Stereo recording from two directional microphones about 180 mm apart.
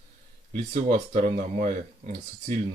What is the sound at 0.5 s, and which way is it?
Speech, 45° right (ahead or behind).